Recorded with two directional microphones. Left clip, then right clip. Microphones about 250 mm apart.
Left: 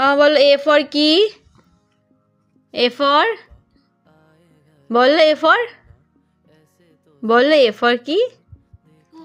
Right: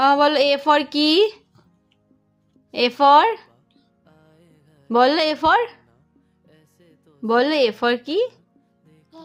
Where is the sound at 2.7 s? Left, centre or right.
Centre.